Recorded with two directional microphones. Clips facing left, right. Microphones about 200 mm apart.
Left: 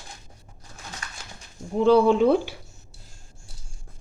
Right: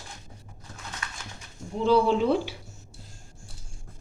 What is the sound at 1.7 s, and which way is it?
Speech, 55° left (ahead or behind).